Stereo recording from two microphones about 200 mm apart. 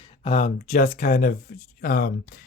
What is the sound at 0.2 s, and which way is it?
Speech, 35° left (ahead or behind).